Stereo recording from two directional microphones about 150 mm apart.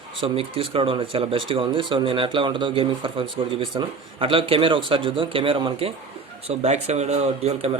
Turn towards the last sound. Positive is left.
turn(degrees=-45)  # may be behind; listen again after turning